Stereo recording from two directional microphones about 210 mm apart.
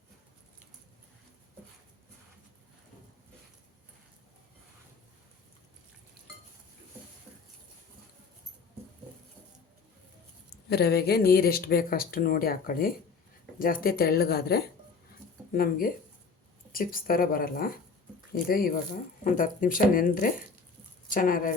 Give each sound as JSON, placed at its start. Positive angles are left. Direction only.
{"t": 10.7, "sound": "speech", "side_deg": 50}